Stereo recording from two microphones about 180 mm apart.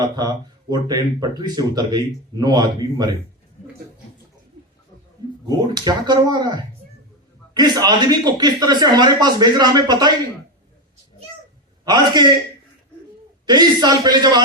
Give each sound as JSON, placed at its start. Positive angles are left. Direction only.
{"t": 0.0, "sound": "speech", "side_deg": -20}
{"t": 5.5, "sound": "speech", "side_deg": -25}
{"t": 11.9, "sound": "speech", "side_deg": -25}
{"t": 13.4, "sound": "speech", "side_deg": -25}